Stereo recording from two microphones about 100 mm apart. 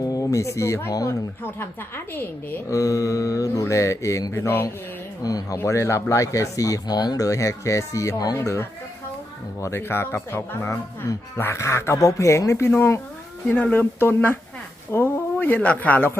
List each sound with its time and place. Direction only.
0.0 s speech: 35° left (ahead or behind)
2.6 s speech: 35° left (ahead or behind)
5.2 s speech: 35° left (ahead or behind); by 16.1 s 15° left (ahead or behind)